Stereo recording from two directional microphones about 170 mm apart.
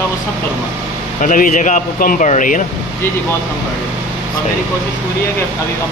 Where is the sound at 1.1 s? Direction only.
50° left (ahead or behind).